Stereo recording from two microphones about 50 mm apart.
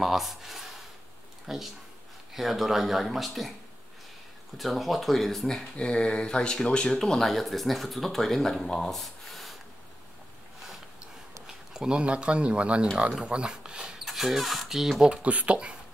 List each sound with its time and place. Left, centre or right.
0.0 s speech: centre
4.6 s speech: centre
5.8 s speech: left
6.9 s speech: centre
11.4 s speech: centre
15.0 s speech: right